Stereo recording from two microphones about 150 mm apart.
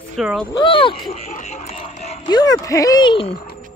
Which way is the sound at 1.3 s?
50° left (ahead or behind).